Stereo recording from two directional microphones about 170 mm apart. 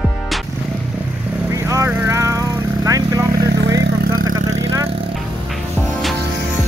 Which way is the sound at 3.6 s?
90° right.